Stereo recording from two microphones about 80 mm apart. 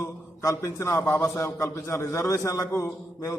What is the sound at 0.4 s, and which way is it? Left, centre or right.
A man's voice, left.